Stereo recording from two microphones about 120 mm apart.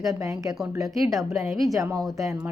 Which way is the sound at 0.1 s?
30° right (ahead or behind).